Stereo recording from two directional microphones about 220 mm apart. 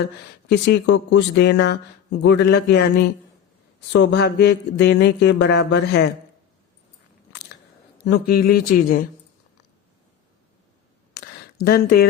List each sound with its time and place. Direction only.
0.4 s speech: 50° left (ahead or behind)
8.0 s speech: 45° left (ahead or behind)
11.1 s a sound: 45° left (ahead or behind)